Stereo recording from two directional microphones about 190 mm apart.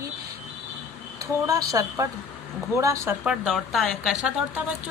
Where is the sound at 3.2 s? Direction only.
5° right (ahead or behind).